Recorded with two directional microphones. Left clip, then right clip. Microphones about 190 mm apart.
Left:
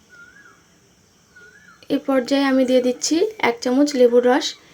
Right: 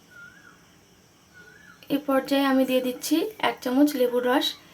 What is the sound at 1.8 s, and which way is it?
Speech, 20° left (ahead or behind).